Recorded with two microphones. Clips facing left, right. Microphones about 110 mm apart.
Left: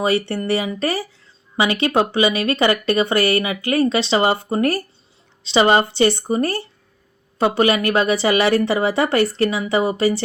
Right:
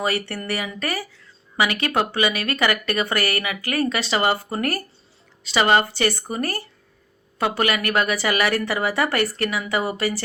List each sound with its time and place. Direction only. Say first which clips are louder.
0.0 s speech: left 6 dB; 25° left (ahead or behind)